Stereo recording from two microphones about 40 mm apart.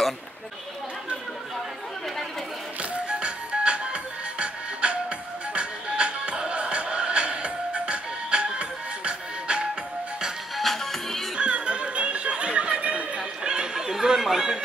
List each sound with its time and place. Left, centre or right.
2.8 s music: right
10.6 s music: centre
11.3 s music: right
13.8 s chatter: centre